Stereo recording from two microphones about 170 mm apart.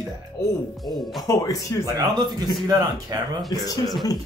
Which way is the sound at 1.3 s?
20° left (ahead or behind).